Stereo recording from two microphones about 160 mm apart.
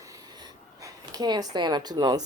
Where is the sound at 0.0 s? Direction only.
20° right (ahead or behind).